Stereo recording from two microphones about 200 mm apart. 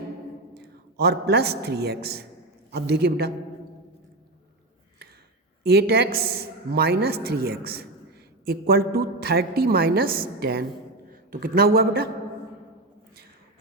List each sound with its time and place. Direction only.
0.5 s a man's voice: 55° right (ahead or behind)
5.6 s a woman's voice: 55° right (ahead or behind)